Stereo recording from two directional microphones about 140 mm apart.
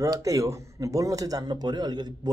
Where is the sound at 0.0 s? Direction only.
25° right (ahead or behind).